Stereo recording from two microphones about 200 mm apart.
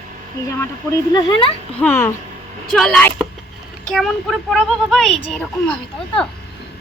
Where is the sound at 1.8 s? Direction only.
10° left (ahead or behind).